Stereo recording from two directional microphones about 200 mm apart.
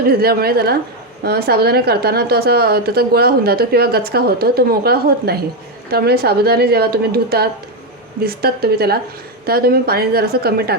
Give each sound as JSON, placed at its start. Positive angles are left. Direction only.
{"t": 0.1, "sound": "a woman's voice", "side_deg": -50}